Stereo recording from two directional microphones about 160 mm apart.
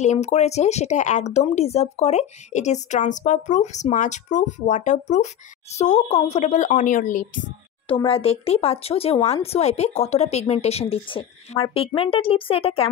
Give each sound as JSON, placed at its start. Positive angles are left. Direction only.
{"t": 0.0, "sound": "speech", "side_deg": 45}
{"t": 7.9, "sound": "speech", "side_deg": 35}